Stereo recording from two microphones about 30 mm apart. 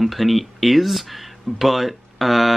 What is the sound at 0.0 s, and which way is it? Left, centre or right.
Speech, centre.